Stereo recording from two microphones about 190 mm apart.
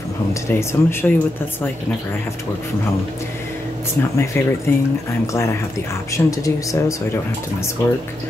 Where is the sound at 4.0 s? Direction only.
10° left (ahead or behind).